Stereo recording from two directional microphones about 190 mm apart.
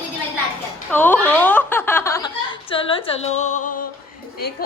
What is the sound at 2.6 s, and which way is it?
Speech, 30° left (ahead or behind).